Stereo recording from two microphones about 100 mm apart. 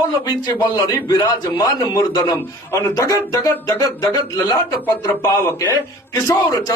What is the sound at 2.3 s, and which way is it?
Speech, 25° left (ahead or behind).